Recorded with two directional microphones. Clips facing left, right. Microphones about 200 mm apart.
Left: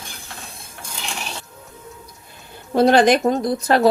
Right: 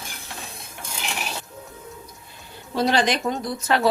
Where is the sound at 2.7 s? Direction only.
50° left (ahead or behind).